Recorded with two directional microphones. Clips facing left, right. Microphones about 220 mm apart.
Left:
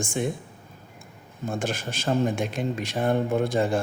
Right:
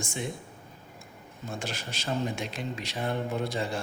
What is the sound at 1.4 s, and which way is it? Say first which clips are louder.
Speech: left 8 dB; 50° left (ahead or behind).